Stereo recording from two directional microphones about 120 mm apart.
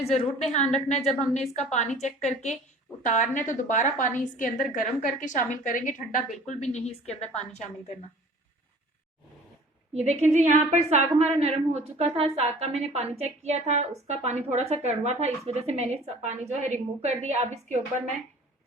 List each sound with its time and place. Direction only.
0.0 s a woman's voice: 70° left (ahead or behind)
3.0 s a woman's voice: 90° left; by 7.6 s 65° left (ahead or behind)
9.9 s a woman's voice: 65° right (ahead or behind)